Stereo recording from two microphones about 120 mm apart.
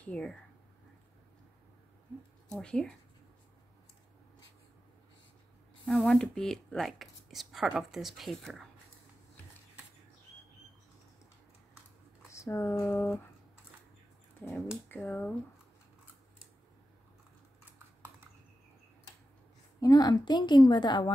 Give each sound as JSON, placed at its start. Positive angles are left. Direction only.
{"t": 0.0, "sound": "speech", "side_deg": 10}
{"t": 2.5, "sound": "speech", "side_deg": 5}
{"t": 5.9, "sound": "speech", "side_deg": 5}
{"t": 12.3, "sound": "speech", "side_deg": 25}
{"t": 15.0, "sound": "speech", "side_deg": 15}
{"t": 19.8, "sound": "a woman's voice", "side_deg": 35}